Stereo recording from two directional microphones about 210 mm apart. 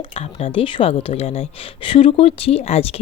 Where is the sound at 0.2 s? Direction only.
25° left (ahead or behind).